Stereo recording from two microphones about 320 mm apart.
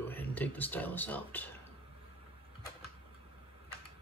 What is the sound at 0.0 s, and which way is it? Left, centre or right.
Speech, centre.